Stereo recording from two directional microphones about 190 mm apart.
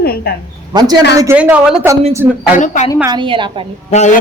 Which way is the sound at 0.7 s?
20° right (ahead or behind).